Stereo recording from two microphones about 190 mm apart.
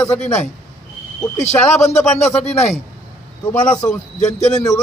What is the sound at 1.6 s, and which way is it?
Speech, 35° left (ahead or behind).